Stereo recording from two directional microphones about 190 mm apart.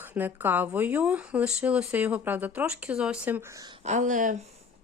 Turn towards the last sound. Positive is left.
turn(degrees=-40)  # may be behind; listen again after turning